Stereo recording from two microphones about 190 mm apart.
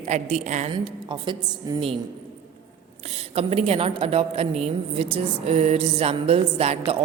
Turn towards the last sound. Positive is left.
turn(degrees=-30)  # may be behind; listen again after turning